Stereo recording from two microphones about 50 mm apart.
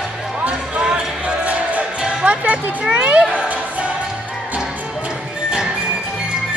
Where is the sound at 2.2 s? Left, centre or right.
Right.